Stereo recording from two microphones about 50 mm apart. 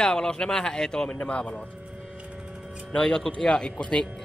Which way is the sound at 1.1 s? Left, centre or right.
Left.